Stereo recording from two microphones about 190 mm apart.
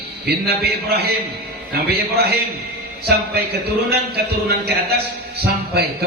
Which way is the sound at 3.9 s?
55° right (ahead or behind).